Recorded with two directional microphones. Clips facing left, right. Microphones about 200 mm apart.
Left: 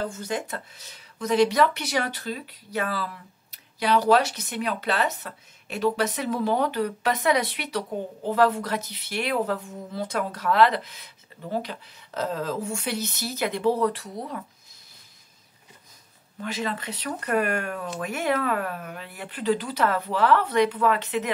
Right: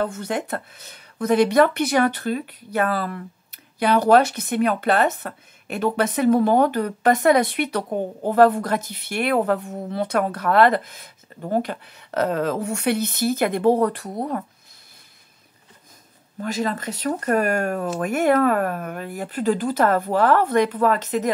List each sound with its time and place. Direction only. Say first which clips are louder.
0.0 s speech: right 5 dB; 60° right (ahead or behind)
16.3 s speech: right 5 dB; 45° right (ahead or behind)